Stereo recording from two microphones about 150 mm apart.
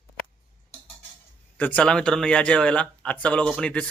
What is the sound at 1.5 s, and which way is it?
Speech, 10° left (ahead or behind).